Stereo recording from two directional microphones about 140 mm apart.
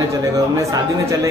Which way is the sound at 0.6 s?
20° right (ahead or behind).